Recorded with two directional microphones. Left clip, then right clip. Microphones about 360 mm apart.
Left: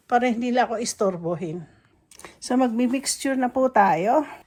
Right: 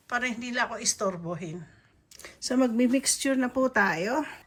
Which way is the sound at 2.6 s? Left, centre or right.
Centre.